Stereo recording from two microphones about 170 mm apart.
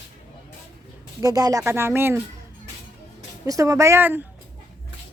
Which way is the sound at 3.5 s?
20° right (ahead or behind).